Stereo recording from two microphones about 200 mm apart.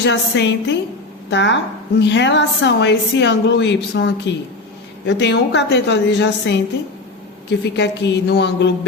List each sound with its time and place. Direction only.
0.0 s a woman's voice: 60° left (ahead or behind)
7.6 s a woman's voice: 60° left (ahead or behind)